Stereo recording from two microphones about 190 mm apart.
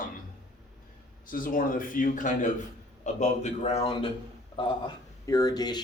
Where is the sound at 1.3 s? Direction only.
45° left (ahead or behind).